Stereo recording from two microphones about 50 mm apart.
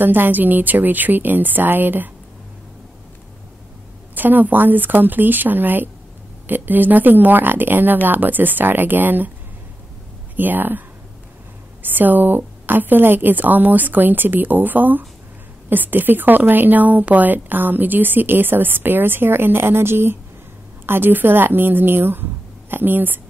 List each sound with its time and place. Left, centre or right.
0.0 s a woman's voice: right
4.1 s a woman's voice: right
10.3 s a woman's voice: right
11.8 s a woman's voice: right